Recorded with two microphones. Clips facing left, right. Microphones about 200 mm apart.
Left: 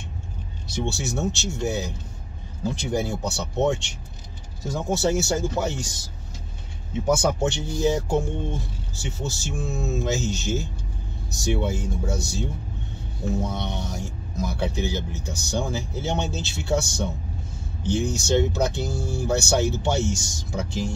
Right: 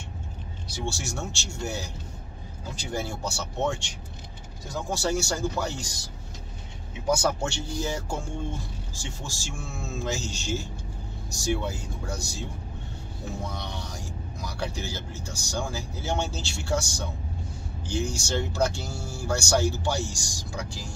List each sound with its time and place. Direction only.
0.7 s speech: 20° left (ahead or behind)
7.1 s speech: 20° left (ahead or behind)
13.4 s speech: 20° left (ahead or behind)